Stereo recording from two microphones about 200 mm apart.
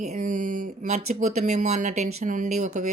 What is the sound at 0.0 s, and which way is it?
Speech, 40° right (ahead or behind).